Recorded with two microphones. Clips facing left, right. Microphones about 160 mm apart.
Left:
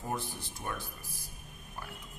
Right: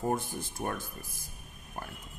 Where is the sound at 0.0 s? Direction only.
50° right (ahead or behind).